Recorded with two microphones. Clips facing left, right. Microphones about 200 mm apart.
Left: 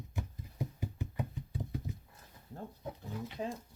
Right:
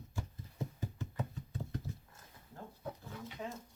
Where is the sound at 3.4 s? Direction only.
30° left (ahead or behind).